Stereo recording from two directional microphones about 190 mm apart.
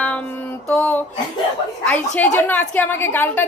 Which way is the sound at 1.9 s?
10° left (ahead or behind).